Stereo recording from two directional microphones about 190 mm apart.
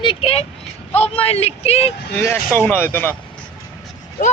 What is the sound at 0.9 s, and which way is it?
Speech, 30° left (ahead or behind).